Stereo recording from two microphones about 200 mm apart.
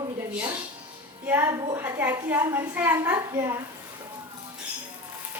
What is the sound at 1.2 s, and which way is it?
A woman's voice, 10° right (ahead or behind).